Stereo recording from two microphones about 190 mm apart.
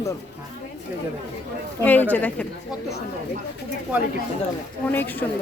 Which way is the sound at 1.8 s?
10° left (ahead or behind).